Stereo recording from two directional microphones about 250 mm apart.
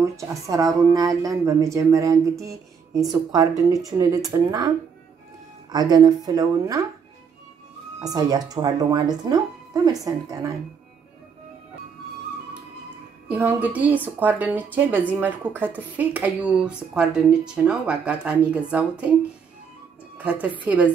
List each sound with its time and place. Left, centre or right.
0.0 s a woman's voice: centre
8.0 s a woman's voice: centre
13.3 s a woman's voice: centre
20.2 s a woman's voice: centre